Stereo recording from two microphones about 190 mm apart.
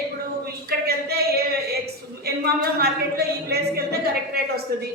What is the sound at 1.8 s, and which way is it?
A woman's voice, 55° right (ahead or behind).